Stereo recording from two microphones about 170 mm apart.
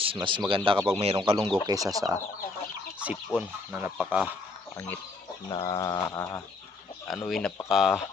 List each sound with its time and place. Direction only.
0.0 s speech: 30° right (ahead or behind)
3.0 s fowl: 10° right (ahead or behind)
5.5 s bird: 25° left (ahead or behind)
7.1 s speech: centre (ahead or behind)